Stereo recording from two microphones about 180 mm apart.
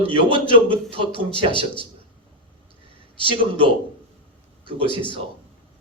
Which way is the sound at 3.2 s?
30° right (ahead or behind).